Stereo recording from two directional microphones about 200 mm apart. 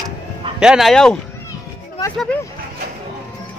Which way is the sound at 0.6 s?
Centre (ahead or behind).